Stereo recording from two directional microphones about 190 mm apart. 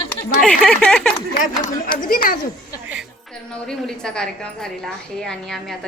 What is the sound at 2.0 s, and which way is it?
Speech, 50° left (ahead or behind).